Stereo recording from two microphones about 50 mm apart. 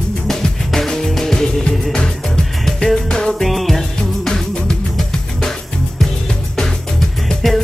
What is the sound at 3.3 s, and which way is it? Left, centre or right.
Music, centre.